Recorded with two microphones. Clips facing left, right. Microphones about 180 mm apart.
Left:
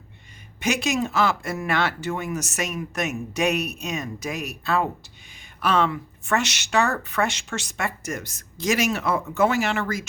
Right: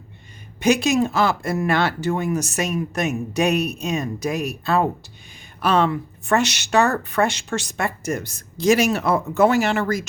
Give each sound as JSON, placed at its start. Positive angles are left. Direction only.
{"t": 0.6, "sound": "speech", "side_deg": -35}